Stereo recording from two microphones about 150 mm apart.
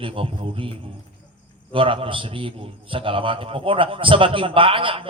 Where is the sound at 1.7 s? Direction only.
35° right (ahead or behind).